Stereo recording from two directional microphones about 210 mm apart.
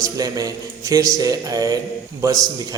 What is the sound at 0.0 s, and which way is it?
A man's voice, 15° right (ahead or behind).